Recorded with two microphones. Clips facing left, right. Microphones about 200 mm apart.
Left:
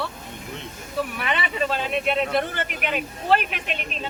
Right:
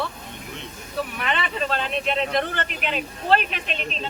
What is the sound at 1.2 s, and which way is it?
Speech, 10° left (ahead or behind).